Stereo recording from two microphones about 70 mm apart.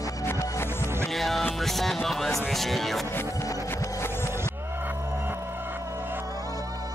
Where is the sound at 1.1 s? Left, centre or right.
Centre.